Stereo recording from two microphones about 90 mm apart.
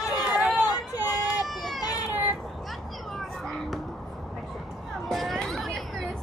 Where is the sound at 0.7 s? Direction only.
45° left (ahead or behind).